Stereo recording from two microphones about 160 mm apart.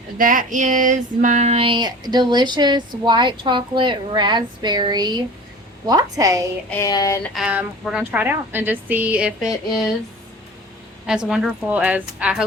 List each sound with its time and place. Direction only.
0.2 s female singing: 60° right (ahead or behind); by 6.4 s 20° right (ahead or behind)
6.7 s a sound: 20° left (ahead or behind)
7.3 s a woman's voice: 5° right (ahead or behind)
11.0 s a woman's voice: 5° right (ahead or behind)